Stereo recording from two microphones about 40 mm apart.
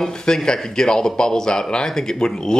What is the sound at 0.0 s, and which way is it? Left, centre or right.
Speech, centre.